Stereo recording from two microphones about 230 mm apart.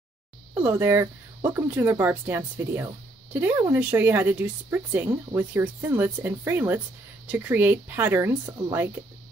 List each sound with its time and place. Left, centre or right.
0.6 s a woman's voice: centre